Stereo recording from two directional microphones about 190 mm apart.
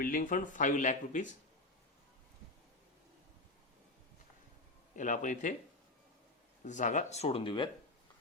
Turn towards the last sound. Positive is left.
turn(degrees=25)  # may be behind; listen again after turning